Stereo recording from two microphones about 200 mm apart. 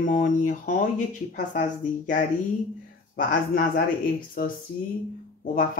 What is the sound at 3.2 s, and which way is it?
Speech, 45° left (ahead or behind).